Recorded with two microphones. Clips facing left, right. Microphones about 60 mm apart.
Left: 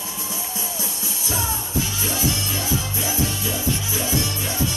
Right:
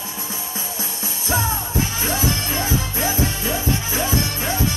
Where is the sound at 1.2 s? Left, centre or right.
Right.